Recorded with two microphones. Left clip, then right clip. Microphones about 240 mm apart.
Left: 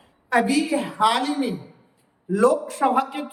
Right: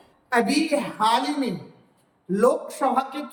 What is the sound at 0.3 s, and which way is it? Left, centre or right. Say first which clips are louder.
Speech: left 1 dB; centre.